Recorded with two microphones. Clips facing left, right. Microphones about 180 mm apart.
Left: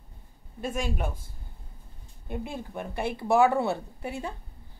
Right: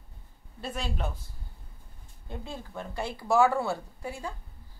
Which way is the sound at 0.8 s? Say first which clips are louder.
Left 3 dB; 10° left (ahead or behind).